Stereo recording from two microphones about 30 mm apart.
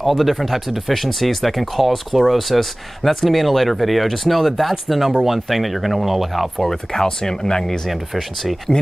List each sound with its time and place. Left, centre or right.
0.0 s speech: centre
6.7 s speech: centre
7.9 s speech: centre